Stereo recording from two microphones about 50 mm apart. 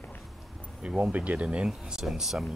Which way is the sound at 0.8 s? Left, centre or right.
Centre.